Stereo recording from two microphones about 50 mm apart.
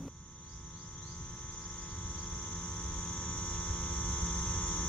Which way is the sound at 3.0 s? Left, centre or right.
Left.